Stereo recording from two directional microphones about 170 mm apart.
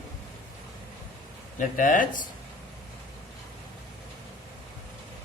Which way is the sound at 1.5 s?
50° left (ahead or behind).